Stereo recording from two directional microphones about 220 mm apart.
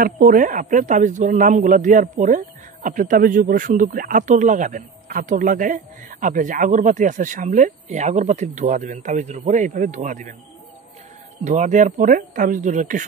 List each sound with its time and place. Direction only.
0.0 s speech: 35° right (ahead or behind)
11.4 s speech: 35° right (ahead or behind)